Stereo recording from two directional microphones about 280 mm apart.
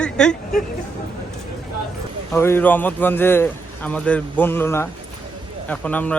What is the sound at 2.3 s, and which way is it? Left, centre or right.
A man's voice, centre.